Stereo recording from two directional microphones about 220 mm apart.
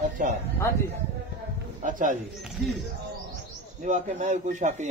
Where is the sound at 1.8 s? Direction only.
35° right (ahead or behind).